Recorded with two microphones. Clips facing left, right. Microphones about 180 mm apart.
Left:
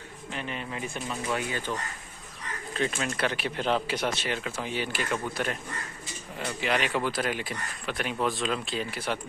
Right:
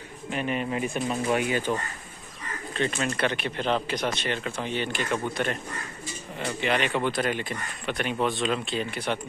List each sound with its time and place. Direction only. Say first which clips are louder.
0.3 s speech: right 7 dB; 15° right (ahead or behind)
2.7 s speech: right 2 dB; centre (ahead or behind)